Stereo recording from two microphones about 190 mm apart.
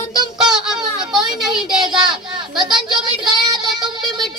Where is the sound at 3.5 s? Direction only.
25° right (ahead or behind).